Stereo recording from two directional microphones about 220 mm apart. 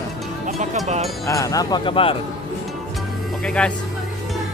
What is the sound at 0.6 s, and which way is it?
Speech, 30° right (ahead or behind).